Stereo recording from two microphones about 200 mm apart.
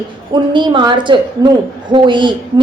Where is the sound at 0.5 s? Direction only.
25° right (ahead or behind).